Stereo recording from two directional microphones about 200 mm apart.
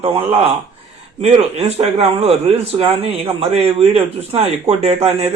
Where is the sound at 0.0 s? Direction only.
25° right (ahead or behind).